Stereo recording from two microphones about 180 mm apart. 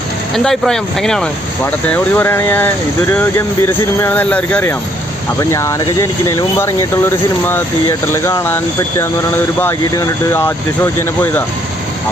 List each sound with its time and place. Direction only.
0.3 s speech: centre (ahead or behind)